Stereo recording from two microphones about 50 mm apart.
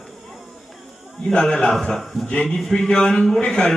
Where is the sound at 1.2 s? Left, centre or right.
Centre.